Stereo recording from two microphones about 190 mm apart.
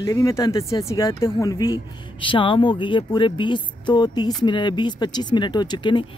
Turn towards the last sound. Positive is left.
turn(degrees=25)  # may be behind; listen again after turning